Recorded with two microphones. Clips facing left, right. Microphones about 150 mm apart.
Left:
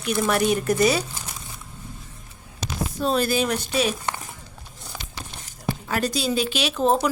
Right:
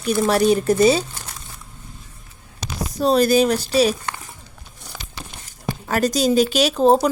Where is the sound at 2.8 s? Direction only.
40° right (ahead or behind).